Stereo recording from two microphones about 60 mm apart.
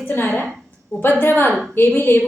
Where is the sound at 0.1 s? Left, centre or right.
Left.